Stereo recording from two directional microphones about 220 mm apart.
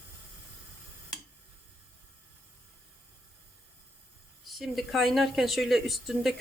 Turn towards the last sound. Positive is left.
turn(degrees=0)  # may be behind; listen again after turning